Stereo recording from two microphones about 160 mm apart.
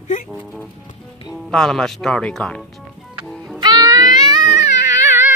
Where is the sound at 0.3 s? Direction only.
Centre (ahead or behind).